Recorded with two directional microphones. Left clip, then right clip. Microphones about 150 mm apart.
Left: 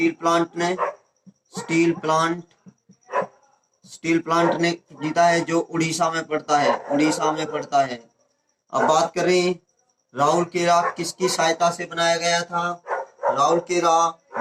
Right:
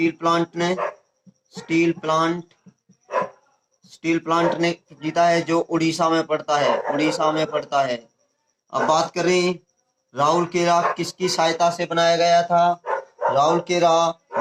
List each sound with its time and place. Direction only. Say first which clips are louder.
0.0 s speech: even; 25° right (ahead or behind)
3.1 s a sound: right 1 dB; 30° right (ahead or behind)
3.8 s speech: even; 25° right (ahead or behind)